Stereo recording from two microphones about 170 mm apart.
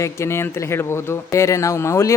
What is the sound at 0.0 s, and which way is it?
Speech, 15° left (ahead or behind).